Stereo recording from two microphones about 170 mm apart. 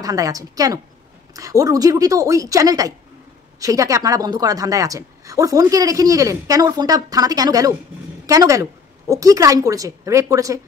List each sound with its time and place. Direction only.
0.0 s speech: 20° right (ahead or behind)